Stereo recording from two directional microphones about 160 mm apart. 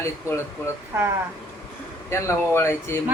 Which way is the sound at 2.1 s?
15° left (ahead or behind).